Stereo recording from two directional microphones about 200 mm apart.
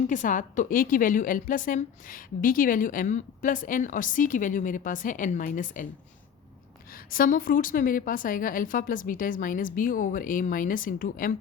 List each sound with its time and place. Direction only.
0.1 s a woman's voice: 40° left (ahead or behind)
6.9 s a woman's voice: 45° left (ahead or behind)